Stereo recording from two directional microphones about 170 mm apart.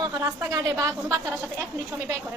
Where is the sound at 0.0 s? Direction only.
20° right (ahead or behind).